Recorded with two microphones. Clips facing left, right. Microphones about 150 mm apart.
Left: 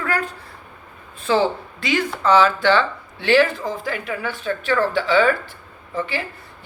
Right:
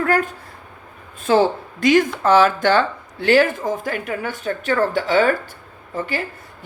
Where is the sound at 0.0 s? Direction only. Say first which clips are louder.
Right 5 dB; 45° right (ahead or behind).